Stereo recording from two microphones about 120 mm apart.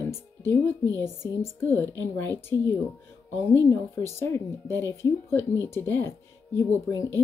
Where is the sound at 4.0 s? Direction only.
20° left (ahead or behind).